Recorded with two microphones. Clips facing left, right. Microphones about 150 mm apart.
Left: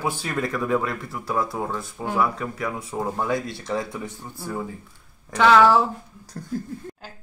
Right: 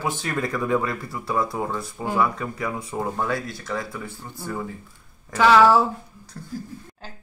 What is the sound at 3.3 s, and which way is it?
Speech, 20° left (ahead or behind).